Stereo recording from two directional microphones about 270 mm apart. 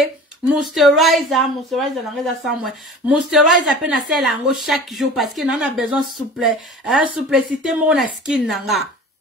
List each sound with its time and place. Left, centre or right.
0.0 s speech: centre